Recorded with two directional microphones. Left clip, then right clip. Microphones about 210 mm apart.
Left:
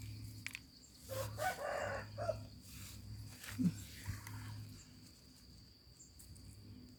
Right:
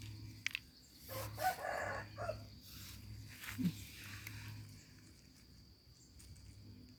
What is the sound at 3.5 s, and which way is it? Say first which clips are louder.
Wild animals: left 2 dB; 10° left (ahead or behind).